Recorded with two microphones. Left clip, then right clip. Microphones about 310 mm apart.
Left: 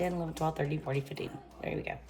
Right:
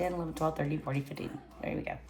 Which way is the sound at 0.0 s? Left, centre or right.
Centre.